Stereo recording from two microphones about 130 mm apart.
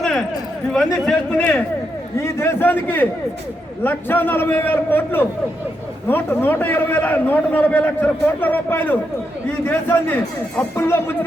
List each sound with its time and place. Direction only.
0.0 s a sound: centre (ahead or behind)
1.0 s a man's voice: 10° left (ahead or behind)
2.1 s a man's voice: 20° left (ahead or behind)